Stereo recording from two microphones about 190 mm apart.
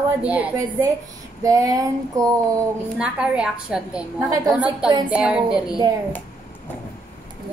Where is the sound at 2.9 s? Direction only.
5° right (ahead or behind).